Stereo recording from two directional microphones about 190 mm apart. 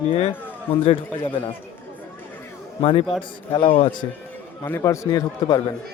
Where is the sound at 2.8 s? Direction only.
30° left (ahead or behind).